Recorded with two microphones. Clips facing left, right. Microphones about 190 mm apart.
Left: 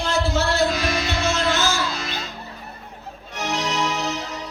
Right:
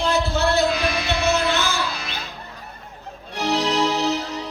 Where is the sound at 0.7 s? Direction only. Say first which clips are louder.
Right 1 dB; 60° right (ahead or behind).